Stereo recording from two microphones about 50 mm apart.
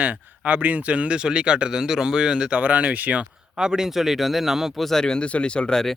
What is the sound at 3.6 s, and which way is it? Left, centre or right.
Speech, centre.